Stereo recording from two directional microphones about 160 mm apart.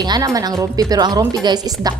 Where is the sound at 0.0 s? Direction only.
25° right (ahead or behind).